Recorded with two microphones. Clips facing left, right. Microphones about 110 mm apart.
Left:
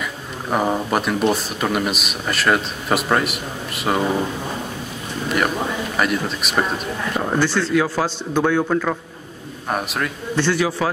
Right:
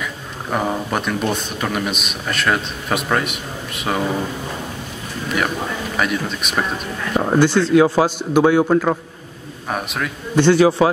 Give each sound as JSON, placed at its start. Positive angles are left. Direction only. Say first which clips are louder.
{"t": 0.0, "sound": "speech", "louder": "even", "side_deg": 5}
{"t": 5.9, "sound": "speech", "louder": "even", "side_deg": 0}
{"t": 7.2, "sound": "a man's voice", "louder": "right 5 dB", "side_deg": -15}
{"t": 9.7, "sound": "speech", "louder": "left 1 dB", "side_deg": 0}
{"t": 10.3, "sound": "a man's voice", "louder": "right 8 dB", "side_deg": -20}